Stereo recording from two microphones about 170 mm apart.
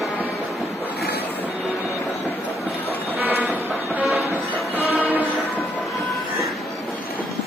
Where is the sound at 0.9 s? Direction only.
75° left (ahead or behind).